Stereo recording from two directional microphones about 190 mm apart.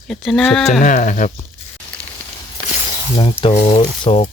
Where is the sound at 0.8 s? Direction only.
45° left (ahead or behind).